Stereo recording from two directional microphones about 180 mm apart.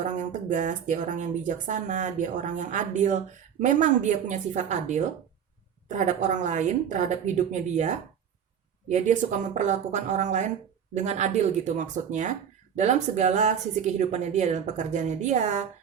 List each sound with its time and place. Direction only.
0.4 s a woman's voice: 45° right (ahead or behind)